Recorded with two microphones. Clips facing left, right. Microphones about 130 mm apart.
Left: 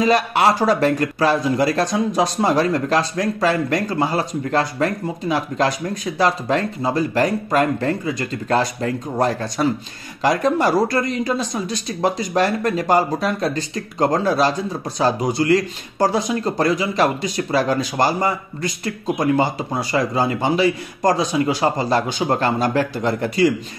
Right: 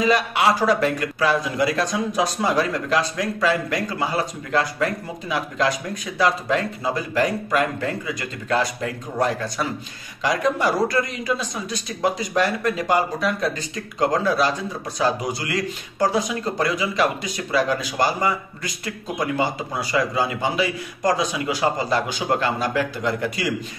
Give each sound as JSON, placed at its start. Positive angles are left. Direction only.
{"t": 0.0, "sound": "speech", "side_deg": 40}
{"t": 10.2, "sound": "speech", "side_deg": 50}
{"t": 10.9, "sound": "speech", "side_deg": 35}